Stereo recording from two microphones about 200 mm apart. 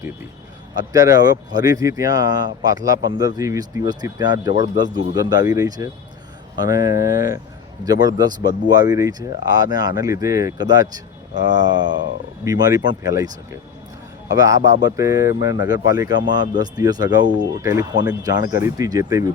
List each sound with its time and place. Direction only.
0.8 s speech: 15° right (ahead or behind)
11.9 s speech: 60° right (ahead or behind)
12.5 s speech: 20° right (ahead or behind)